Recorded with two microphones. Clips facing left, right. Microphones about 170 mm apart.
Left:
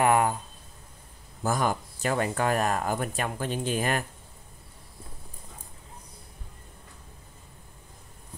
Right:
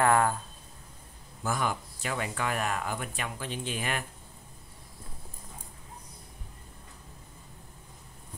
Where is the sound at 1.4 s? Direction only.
40° left (ahead or behind).